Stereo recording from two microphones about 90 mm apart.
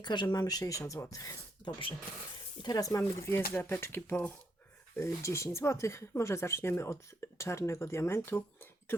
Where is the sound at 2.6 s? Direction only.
45° left (ahead or behind).